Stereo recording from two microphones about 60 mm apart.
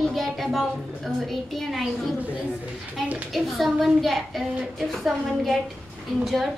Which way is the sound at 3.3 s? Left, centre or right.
Centre.